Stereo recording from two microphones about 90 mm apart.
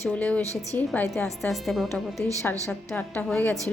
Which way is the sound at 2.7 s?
15° left (ahead or behind).